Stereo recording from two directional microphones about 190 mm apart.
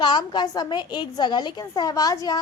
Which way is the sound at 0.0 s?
25° left (ahead or behind).